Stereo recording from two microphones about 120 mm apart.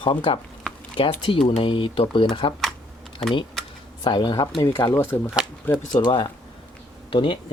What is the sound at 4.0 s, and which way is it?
Speech, 40° left (ahead or behind).